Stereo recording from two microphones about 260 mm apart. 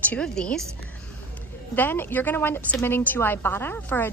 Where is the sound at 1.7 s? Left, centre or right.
Centre.